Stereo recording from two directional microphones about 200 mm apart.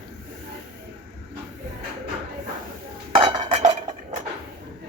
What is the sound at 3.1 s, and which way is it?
Dishes, 25° right (ahead or behind).